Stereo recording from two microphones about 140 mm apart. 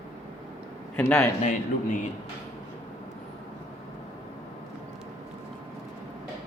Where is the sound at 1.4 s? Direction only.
70° left (ahead or behind).